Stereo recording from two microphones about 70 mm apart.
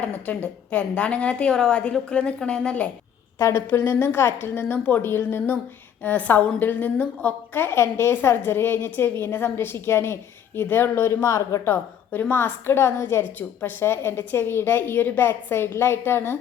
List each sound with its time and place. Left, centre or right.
0.0 s a woman's voice: left
3.3 s a woman's voice: left